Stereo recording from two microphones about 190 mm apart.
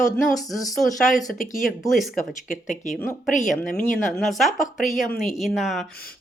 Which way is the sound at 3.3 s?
45° left (ahead or behind).